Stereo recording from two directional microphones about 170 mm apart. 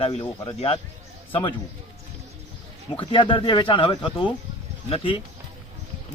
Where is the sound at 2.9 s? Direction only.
30° left (ahead or behind).